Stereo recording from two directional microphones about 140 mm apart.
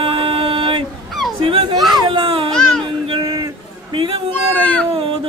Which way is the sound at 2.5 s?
5° left (ahead or behind).